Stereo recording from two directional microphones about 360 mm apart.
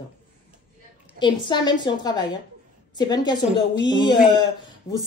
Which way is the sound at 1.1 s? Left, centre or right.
Centre.